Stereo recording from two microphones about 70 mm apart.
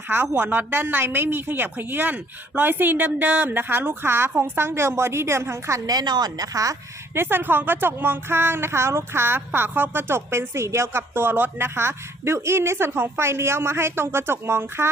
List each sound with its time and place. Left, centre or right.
0.1 s a woman's voice: right
5.8 s a woman's voice: right
7.1 s a woman's voice: right